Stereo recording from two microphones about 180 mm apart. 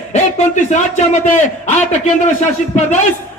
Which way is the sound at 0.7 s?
45° left (ahead or behind).